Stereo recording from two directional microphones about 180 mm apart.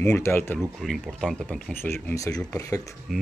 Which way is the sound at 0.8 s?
Centre (ahead or behind).